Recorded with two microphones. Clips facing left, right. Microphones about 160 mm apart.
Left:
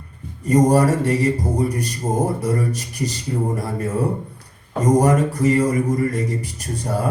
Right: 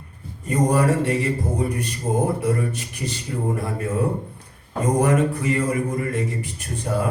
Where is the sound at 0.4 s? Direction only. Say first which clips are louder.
Left 4 dB; 40° left (ahead or behind).